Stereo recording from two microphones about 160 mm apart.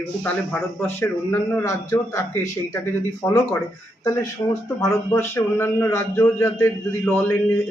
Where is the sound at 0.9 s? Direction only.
15° left (ahead or behind).